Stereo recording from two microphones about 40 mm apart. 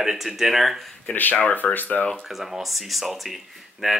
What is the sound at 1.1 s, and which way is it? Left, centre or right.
Speech, left.